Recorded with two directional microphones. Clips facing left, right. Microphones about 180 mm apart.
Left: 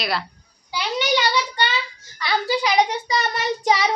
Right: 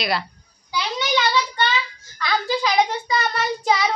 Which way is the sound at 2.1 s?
15° left (ahead or behind).